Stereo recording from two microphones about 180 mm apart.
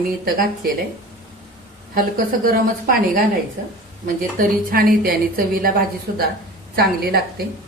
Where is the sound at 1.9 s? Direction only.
50° right (ahead or behind).